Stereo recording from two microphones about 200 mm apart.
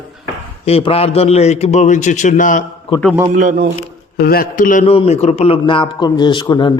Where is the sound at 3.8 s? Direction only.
50° left (ahead or behind).